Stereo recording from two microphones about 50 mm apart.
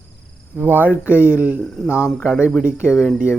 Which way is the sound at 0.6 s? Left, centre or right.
Right.